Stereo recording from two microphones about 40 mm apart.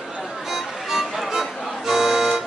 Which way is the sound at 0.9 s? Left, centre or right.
Centre.